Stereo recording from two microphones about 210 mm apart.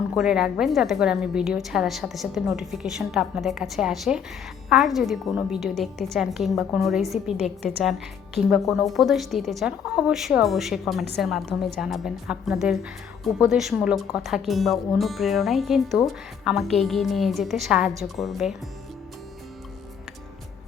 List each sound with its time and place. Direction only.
0.1 s a woman's voice: 5° right (ahead or behind)